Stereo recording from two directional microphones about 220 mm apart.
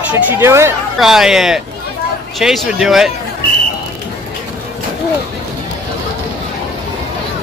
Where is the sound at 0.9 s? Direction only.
Centre (ahead or behind).